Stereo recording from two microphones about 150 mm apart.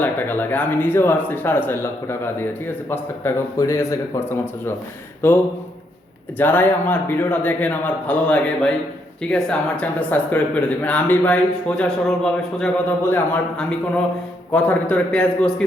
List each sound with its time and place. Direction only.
0.0 s speech: 10° left (ahead or behind)